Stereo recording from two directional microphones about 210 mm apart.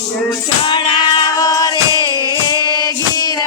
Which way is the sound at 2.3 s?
20° left (ahead or behind).